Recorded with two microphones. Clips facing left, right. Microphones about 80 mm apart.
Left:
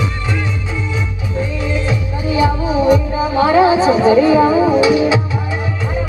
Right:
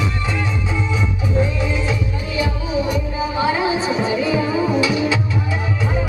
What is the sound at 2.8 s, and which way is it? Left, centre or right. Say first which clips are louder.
Music: left 8 dB; left.